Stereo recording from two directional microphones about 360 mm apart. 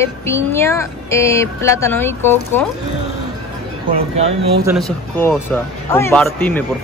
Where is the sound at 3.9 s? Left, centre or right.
Centre.